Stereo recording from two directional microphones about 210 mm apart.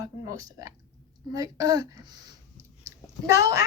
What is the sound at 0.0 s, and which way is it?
A woman's voice, 15° right (ahead or behind).